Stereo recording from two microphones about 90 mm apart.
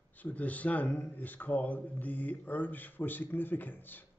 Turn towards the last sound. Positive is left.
turn(degrees=20)  # may be behind; listen again after turning